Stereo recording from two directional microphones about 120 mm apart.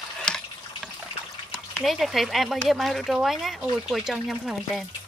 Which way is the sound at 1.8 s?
Centre (ahead or behind).